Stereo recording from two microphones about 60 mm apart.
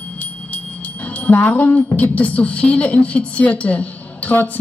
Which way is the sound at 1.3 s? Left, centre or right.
Left.